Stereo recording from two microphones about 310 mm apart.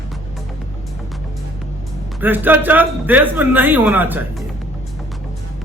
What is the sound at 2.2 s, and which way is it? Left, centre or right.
Speech, centre.